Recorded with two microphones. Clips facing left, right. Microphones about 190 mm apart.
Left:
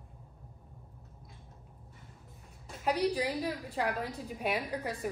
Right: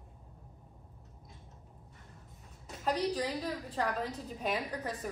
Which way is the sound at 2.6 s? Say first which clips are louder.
Left 2 dB; 10° left (ahead or behind).